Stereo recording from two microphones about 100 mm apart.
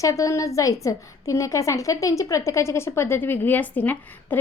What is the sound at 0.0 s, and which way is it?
A woman's voice, 35° left (ahead or behind).